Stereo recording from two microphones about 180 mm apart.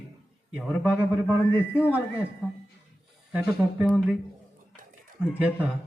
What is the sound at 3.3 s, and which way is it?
Speech, 5° right (ahead or behind).